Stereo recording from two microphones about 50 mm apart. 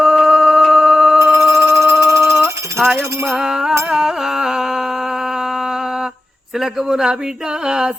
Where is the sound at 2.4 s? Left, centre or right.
Right.